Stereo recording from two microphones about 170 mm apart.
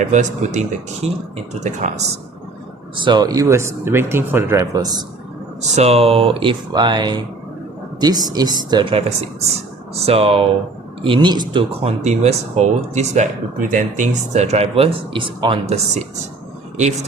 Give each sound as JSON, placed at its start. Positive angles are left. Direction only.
{"t": 0.0, "sound": "speech", "side_deg": -45}
{"t": 2.9, "sound": "speech", "side_deg": -25}
{"t": 5.7, "sound": "speech", "side_deg": -40}
{"t": 11.8, "sound": "speech", "side_deg": -40}